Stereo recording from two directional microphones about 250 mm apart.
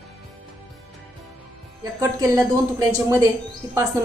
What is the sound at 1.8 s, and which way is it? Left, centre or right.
Speech, centre.